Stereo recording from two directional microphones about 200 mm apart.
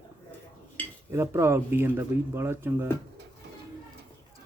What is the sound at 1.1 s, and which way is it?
Speech, 15° right (ahead or behind).